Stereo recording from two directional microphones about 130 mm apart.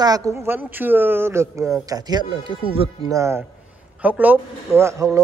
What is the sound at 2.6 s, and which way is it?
Speech, 45° right (ahead or behind).